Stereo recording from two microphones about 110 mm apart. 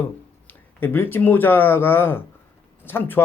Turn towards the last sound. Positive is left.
turn(degrees=20)  # may be behind; listen again after turning